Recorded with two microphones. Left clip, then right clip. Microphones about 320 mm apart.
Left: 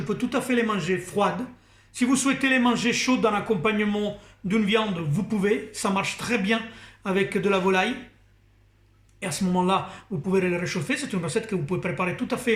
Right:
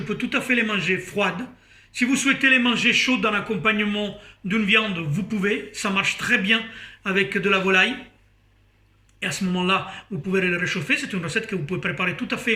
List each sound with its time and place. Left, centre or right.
0.1 s a man's voice: centre
9.2 s a man's voice: centre